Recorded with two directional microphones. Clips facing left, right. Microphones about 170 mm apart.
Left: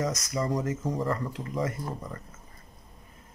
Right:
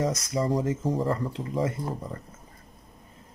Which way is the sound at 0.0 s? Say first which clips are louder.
Right 3 dB; 30° right (ahead or behind).